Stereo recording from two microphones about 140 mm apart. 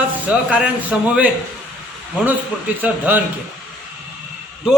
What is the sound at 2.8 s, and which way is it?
Speech, 10° right (ahead or behind).